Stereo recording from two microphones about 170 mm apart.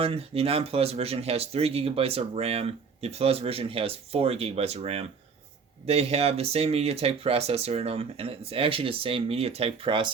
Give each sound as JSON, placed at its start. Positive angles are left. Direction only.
{"t": 0.0, "sound": "speech", "side_deg": -35}